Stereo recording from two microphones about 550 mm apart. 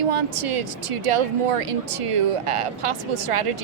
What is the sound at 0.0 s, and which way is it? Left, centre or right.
Speech, right.